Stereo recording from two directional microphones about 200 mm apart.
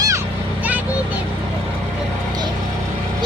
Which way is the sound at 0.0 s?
15° right (ahead or behind).